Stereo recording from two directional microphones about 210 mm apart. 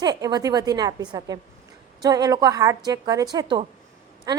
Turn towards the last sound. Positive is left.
turn(degrees=-20)  # may be behind; listen again after turning